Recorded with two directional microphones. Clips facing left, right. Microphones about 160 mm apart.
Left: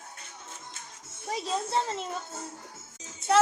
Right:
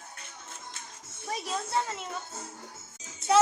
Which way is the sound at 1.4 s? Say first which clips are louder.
Left 2 dB; 30° left (ahead or behind).